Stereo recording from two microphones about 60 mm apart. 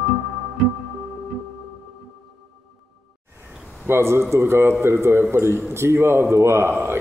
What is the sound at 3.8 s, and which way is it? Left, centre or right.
A man's voice, right.